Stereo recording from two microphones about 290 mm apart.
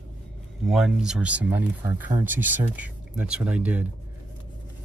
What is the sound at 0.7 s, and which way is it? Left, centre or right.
Speech, centre.